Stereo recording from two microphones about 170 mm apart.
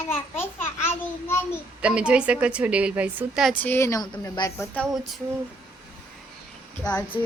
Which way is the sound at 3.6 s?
15° left (ahead or behind).